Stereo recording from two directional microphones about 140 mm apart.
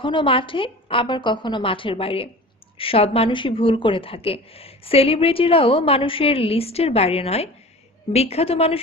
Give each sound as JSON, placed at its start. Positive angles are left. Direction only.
{"t": 0.0, "sound": "a woman's voice", "side_deg": 35}